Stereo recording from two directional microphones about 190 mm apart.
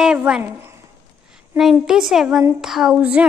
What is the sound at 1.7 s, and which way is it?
A woman's voice, centre (ahead or behind).